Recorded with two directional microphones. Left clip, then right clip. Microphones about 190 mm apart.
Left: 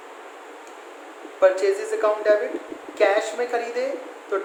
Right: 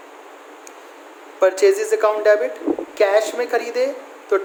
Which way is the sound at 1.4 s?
55° right (ahead or behind).